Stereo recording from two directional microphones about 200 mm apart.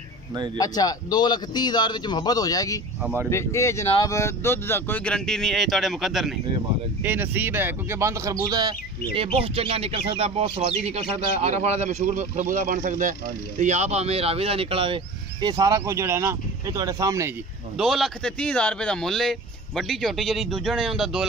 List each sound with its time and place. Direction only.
0.6 s a man's voice: 20° left (ahead or behind)
3.0 s speech: 5° right (ahead or behind)
3.3 s a man's voice: 15° left (ahead or behind); by 17.3 s 15° right (ahead or behind)
17.7 s speech: centre (ahead or behind)